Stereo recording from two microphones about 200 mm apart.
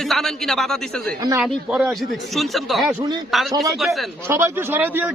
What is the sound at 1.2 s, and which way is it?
Speech, 15° right (ahead or behind).